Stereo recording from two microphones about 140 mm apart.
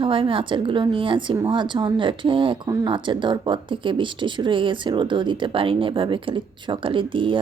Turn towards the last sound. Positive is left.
turn(degrees=-35)  # may be behind; listen again after turning